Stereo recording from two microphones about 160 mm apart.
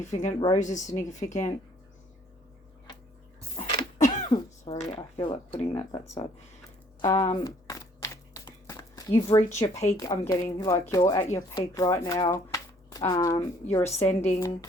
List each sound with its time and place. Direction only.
0.0 s speech: 50° left (ahead or behind)
3.6 s a sound: 50° left (ahead or behind)
4.6 s speech: 40° left (ahead or behind)
5.7 s speech: 30° left (ahead or behind)
7.0 s speech: 20° left (ahead or behind)
7.4 s a sound: 20° left (ahead or behind)
9.6 s speech: 25° left (ahead or behind)
13.8 s speech: 40° left (ahead or behind)
14.3 s speech: 20° left (ahead or behind)